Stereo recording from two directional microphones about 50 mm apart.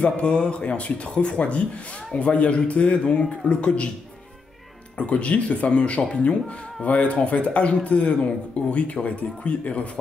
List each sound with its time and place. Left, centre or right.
0.0 s speech: left
4.9 s speech: left